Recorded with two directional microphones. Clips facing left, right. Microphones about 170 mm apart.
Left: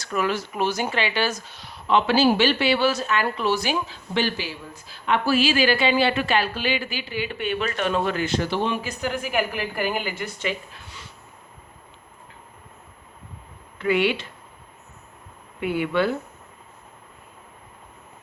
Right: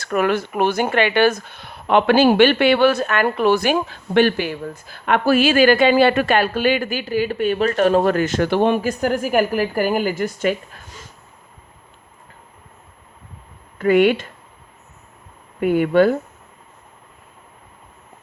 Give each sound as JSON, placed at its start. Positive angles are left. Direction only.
{"t": 0.0, "sound": "speech", "side_deg": -60}
{"t": 13.7, "sound": "speech", "side_deg": -45}
{"t": 15.6, "sound": "speech", "side_deg": -45}